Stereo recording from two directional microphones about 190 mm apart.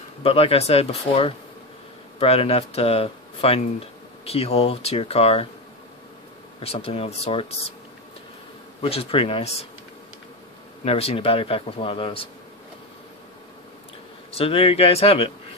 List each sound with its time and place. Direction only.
0.2 s speech: 30° left (ahead or behind)
6.6 s speech: 30° left (ahead or behind)
8.8 s speech: 30° left (ahead or behind)
10.8 s a man's voice: 30° left (ahead or behind)
14.3 s speech: 30° left (ahead or behind)